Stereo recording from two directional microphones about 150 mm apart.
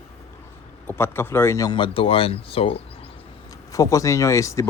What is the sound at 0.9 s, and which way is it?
Speech, 15° left (ahead or behind).